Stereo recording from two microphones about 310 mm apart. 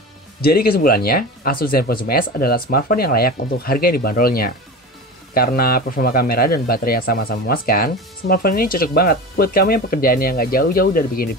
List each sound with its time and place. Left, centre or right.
0.4 s speech: left